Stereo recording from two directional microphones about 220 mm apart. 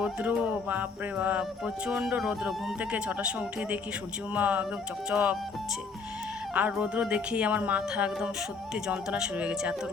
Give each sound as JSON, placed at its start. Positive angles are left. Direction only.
{"t": 0.0, "sound": "music", "side_deg": -5}
{"t": 6.5, "sound": "music", "side_deg": -5}